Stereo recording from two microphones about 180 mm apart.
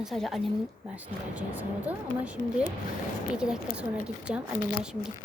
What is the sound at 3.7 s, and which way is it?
Speech, 5° right (ahead or behind).